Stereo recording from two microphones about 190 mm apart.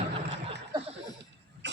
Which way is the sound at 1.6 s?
65° right (ahead or behind).